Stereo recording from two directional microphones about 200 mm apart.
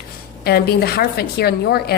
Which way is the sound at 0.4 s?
50° left (ahead or behind).